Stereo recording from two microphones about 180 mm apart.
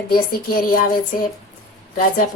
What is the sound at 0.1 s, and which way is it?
Speech, 55° left (ahead or behind).